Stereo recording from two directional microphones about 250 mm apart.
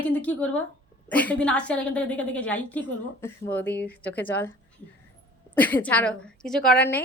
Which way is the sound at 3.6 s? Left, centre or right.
Left.